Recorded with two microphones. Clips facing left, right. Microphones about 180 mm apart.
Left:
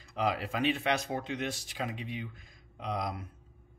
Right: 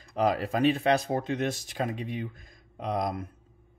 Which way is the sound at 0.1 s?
45° right (ahead or behind).